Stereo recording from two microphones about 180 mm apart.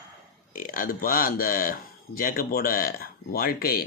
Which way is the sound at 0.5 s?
50° left (ahead or behind).